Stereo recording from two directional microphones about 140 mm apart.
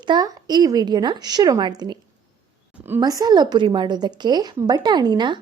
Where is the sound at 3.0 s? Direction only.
30° right (ahead or behind).